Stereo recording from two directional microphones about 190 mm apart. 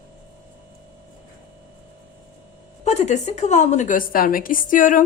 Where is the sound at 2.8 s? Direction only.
35° left (ahead or behind).